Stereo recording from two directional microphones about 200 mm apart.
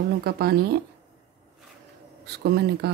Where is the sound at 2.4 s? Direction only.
55° right (ahead or behind).